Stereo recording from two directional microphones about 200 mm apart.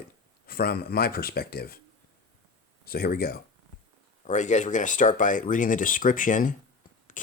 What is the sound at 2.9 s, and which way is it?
Speech, 50° left (ahead or behind).